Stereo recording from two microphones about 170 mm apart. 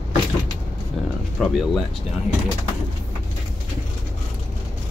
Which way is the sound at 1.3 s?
5° left (ahead or behind).